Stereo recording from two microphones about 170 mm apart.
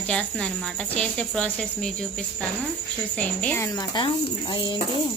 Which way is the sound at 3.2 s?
10° left (ahead or behind).